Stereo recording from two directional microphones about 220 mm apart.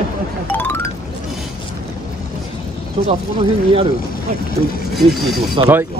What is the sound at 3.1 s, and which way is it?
Speech, 25° right (ahead or behind).